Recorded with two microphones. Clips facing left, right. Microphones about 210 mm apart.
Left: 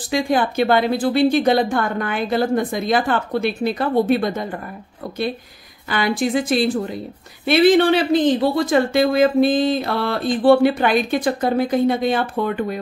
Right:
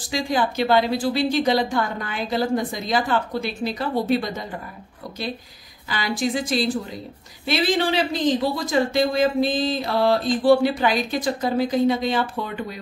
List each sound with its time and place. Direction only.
0.1 s speech: 55° left (ahead or behind)
5.9 s speech: 55° left (ahead or behind)